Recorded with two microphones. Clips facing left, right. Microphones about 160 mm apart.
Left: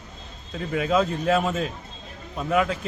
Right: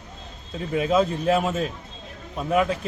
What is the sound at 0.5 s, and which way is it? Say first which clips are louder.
Speech: right 1 dB; 25° right (ahead or behind).